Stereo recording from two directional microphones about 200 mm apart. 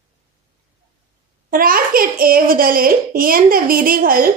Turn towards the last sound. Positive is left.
turn(degrees=-45)  # may be behind; listen again after turning